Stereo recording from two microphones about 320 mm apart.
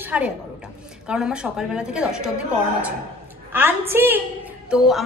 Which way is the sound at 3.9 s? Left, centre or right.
Centre.